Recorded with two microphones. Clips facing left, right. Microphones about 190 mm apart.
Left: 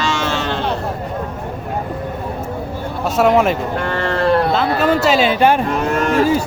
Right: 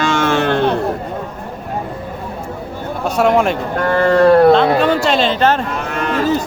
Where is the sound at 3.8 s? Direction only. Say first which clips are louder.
Right 7 dB; 40° right (ahead or behind).